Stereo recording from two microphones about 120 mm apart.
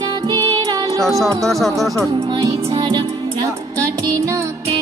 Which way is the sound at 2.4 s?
25° right (ahead or behind).